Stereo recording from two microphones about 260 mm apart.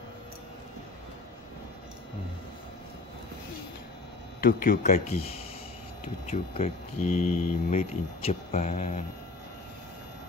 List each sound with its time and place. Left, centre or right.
4.4 s speech: left